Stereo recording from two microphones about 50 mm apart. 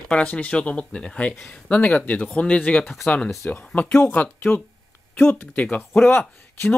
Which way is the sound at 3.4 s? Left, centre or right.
Left.